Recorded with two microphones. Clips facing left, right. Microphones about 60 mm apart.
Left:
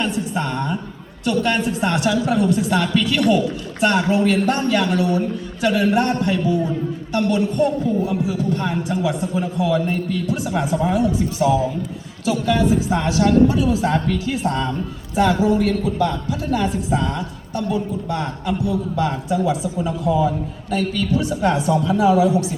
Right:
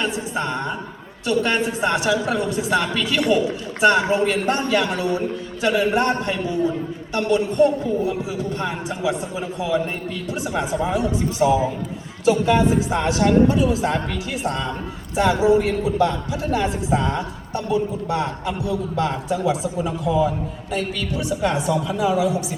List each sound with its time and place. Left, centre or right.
0.0 s a woman's voice: centre
10.5 s a woman's voice: centre
10.8 s a woman's voice: centre
15.1 s a woman's voice: centre
20.1 s a woman's voice: centre